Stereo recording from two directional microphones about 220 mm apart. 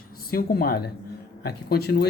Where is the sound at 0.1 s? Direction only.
40° left (ahead or behind).